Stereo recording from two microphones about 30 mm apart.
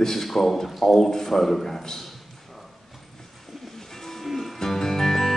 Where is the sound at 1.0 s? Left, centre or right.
Centre.